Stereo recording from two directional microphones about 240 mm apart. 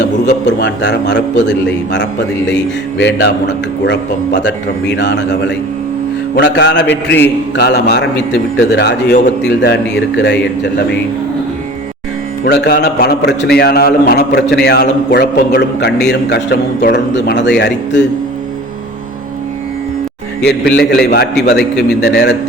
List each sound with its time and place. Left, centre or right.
0.4 s a man's voice: left
3.0 s a man's voice: left
12.5 s a man's voice: left
20.4 s a man's voice: left